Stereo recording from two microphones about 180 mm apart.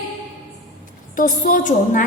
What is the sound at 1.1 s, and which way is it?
Speech, 45° left (ahead or behind).